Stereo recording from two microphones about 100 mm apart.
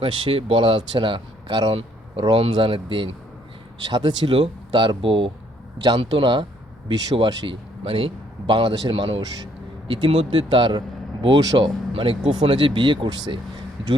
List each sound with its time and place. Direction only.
0.0 s speech: 60° right (ahead or behind); by 1.7 s 45° right (ahead or behind)
2.5 s speech: 60° right (ahead or behind)
3.8 s speech: 45° right (ahead or behind)
7.4 s a man's voice: 60° right (ahead or behind)
11.6 s speech: 60° right (ahead or behind)